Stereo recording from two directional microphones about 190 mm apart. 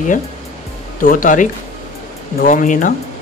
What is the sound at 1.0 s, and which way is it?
Speech, 45° left (ahead or behind).